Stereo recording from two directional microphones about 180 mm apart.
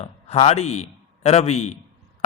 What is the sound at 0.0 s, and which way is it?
A man's voice, 35° left (ahead or behind).